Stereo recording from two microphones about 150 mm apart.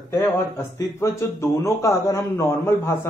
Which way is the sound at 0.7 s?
20° left (ahead or behind).